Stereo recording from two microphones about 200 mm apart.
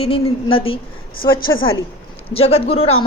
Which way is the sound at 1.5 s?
85° left.